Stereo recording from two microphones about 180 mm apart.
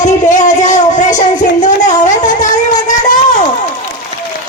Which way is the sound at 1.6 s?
45° left (ahead or behind).